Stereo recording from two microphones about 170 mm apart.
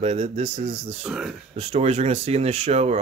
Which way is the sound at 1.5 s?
35° right (ahead or behind).